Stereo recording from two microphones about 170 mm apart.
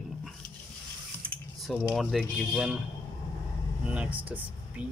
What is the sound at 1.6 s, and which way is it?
Speech, centre (ahead or behind).